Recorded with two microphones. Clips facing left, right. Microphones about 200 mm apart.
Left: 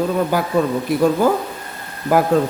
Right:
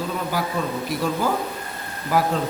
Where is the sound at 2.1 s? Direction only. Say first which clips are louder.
Left 7 dB; 50° left (ahead or behind).